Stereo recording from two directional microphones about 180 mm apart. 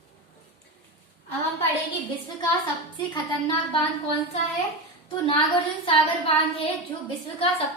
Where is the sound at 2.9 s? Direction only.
25° left (ahead or behind).